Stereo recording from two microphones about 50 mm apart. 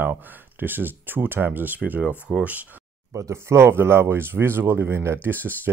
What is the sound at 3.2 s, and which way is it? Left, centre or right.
Speech, right.